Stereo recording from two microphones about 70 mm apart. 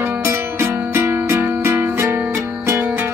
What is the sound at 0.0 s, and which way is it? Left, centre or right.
Music, right.